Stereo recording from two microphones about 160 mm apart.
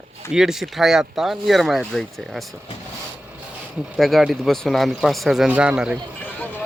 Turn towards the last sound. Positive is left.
turn(degrees=10)  # may be behind; listen again after turning